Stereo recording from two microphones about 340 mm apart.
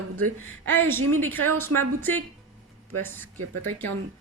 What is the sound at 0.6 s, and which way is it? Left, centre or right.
A woman's voice, centre.